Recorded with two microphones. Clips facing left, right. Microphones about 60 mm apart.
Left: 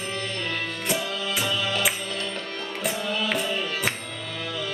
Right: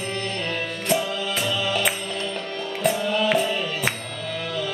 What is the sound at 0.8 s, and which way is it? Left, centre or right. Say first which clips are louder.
Music: right 5 dB; centre.